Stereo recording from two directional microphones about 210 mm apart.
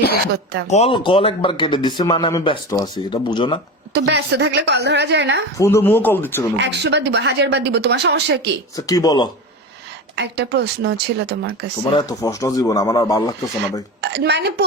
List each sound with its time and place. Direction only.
0.7 s speech: 30° left (ahead or behind)
3.9 s a woman's voice: 55° right (ahead or behind)
5.5 s speech: 15° left (ahead or behind)
6.6 s speech: 55° right (ahead or behind)
8.7 s speech: 15° left (ahead or behind)
10.2 s speech: 55° right (ahead or behind)
11.9 s speech: 20° left (ahead or behind)
14.0 s speech: 55° right (ahead or behind)